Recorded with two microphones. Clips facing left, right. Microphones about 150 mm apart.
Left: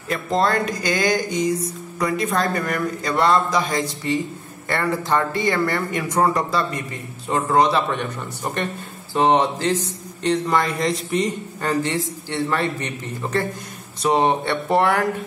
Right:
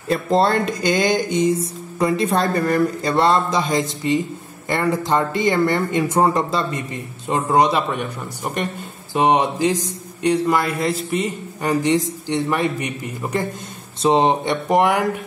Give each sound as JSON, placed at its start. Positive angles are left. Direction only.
{"t": 0.1, "sound": "a man's voice", "side_deg": -30}